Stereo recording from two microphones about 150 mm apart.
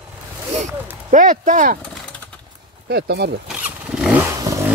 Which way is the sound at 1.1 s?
60° right (ahead or behind).